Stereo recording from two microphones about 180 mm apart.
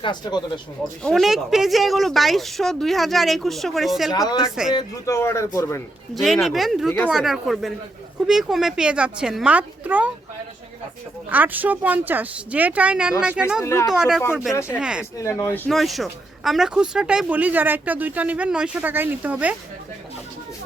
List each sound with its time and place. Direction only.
0.0 s speech: 25° left (ahead or behind)
1.0 s speech: centre (ahead or behind)
4.7 s speech: 20° left (ahead or behind)
6.2 s speech: centre (ahead or behind)
11.3 s speech: 10° right (ahead or behind)
13.6 s speech: 15° left (ahead or behind)
13.8 s speech: 5° right (ahead or behind)
14.5 s speech: 15° left (ahead or behind)
14.8 s speech: 5° right (ahead or behind)
15.2 s speech: 15° left (ahead or behind)
15.7 s speech: centre (ahead or behind)